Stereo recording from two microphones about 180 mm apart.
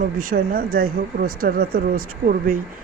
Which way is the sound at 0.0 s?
50° right (ahead or behind).